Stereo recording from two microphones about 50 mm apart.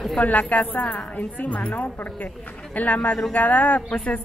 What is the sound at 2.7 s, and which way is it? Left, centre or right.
A woman's voice, left.